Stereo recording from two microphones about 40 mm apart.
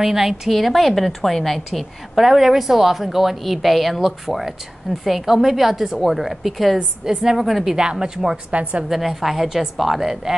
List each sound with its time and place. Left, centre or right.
0.0 s a woman's voice: centre
7.7 s speech: right
8.5 s a woman's voice: right
8.8 s a woman's voice: centre